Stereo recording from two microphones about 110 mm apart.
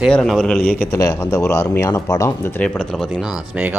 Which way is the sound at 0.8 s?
25° left (ahead or behind).